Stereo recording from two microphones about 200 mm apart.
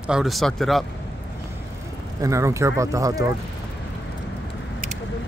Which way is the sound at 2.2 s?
15° right (ahead or behind).